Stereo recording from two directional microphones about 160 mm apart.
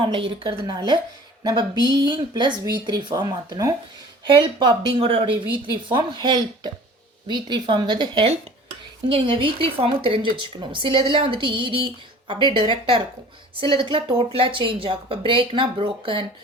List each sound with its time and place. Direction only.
0.0 s speech: 30° right (ahead or behind)